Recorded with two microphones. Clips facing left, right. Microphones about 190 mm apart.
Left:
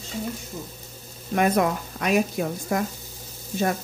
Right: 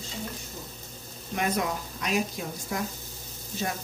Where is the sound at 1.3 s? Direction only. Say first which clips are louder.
Left 7 dB; 55° left (ahead or behind).